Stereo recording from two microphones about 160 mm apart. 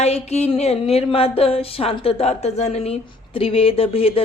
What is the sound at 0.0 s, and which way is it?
A woman's voice, 45° left (ahead or behind).